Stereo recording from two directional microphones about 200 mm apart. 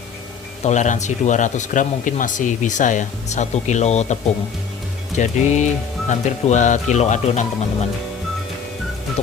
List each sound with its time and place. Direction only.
0.6 s speech: 35° left (ahead or behind)